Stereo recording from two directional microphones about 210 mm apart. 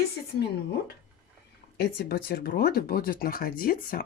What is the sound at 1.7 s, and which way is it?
Speech, 50° left (ahead or behind).